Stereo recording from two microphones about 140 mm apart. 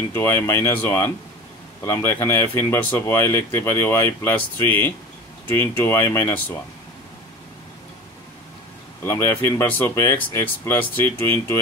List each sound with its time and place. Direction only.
0.1 s speech: 15° left (ahead or behind)
9.0 s speech: 20° left (ahead or behind)